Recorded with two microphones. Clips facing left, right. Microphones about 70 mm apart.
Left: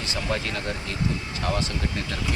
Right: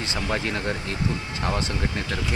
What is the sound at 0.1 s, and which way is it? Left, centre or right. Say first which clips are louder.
Speech: right 1 dB; right.